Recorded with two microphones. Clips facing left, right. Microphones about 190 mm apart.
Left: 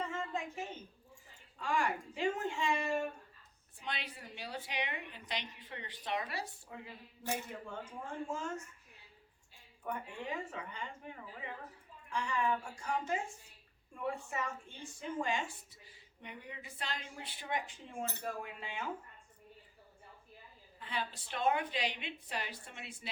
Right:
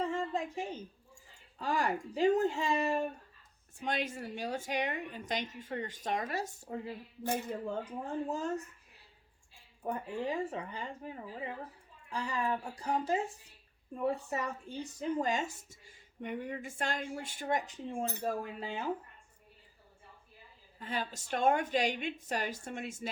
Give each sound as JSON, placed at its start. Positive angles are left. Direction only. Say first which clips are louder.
{"t": 0.1, "sound": "a sound", "louder": "right 5 dB", "side_deg": -35}
{"t": 1.5, "sound": "a woman's voice", "louder": "right 2 dB", "side_deg": -35}
{"t": 9.8, "sound": "a woman's voice", "louder": "right 6 dB", "side_deg": -30}
{"t": 20.7, "sound": "a woman's voice", "louder": "right 3 dB", "side_deg": -45}